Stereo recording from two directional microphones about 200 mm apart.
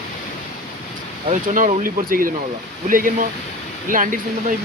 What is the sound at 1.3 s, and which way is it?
Speech, 40° right (ahead or behind).